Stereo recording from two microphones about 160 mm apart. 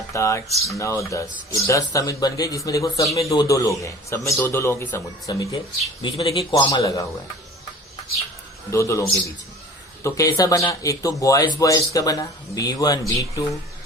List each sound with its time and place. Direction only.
0.1 s a man's voice: 20° left (ahead or behind)
6.0 s a man's voice: 30° left (ahead or behind)
8.7 s a man's voice: 20° left (ahead or behind)